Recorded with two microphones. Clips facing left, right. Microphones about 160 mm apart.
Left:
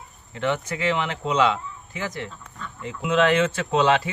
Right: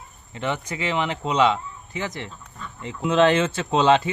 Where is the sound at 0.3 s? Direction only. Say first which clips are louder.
Left 2 dB; 15° right (ahead or behind).